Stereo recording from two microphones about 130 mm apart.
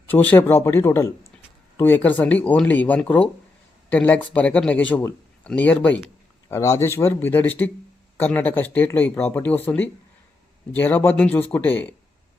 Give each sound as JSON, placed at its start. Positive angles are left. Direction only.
{"t": 0.1, "sound": "speech", "side_deg": 15}
{"t": 6.5, "sound": "speech", "side_deg": 20}